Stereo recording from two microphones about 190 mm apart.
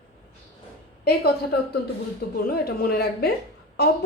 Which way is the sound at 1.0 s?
55° left (ahead or behind).